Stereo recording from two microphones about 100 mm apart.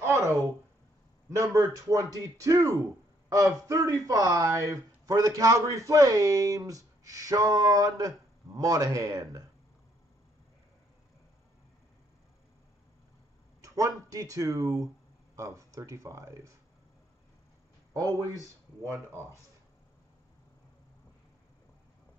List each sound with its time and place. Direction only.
1.3 s speech: 35° right (ahead or behind)
13.6 s speech: 35° right (ahead or behind)
17.9 s speech: 35° right (ahead or behind)